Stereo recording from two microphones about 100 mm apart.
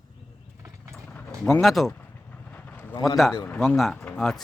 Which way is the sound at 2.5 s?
15° left (ahead or behind).